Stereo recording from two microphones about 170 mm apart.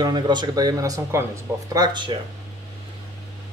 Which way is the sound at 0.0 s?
25° right (ahead or behind).